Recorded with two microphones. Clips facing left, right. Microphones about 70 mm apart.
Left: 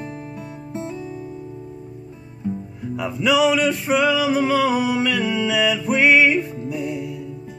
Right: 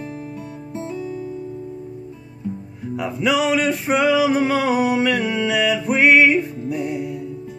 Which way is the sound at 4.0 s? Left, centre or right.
Centre.